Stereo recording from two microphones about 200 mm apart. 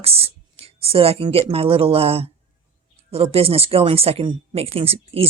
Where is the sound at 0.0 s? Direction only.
30° right (ahead or behind).